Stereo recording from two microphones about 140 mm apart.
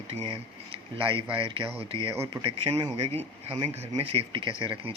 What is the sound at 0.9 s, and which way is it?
Speech, 40° right (ahead or behind).